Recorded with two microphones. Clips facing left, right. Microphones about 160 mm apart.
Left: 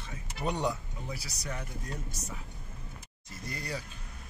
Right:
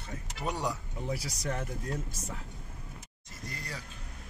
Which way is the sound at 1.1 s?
90° right.